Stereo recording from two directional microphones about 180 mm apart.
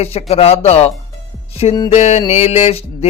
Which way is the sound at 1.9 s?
35° left (ahead or behind).